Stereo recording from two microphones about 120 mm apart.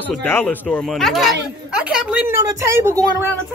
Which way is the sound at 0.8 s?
Centre (ahead or behind).